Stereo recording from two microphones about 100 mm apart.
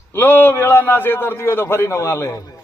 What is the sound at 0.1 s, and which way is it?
A man's voice, 20° left (ahead or behind).